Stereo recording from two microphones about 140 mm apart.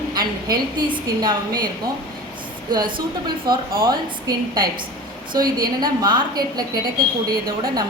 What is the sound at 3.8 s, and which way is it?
A woman's voice, 30° right (ahead or behind).